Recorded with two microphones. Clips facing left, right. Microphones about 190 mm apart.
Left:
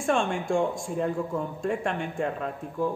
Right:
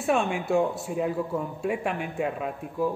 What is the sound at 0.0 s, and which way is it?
A man's voice, 5° right (ahead or behind).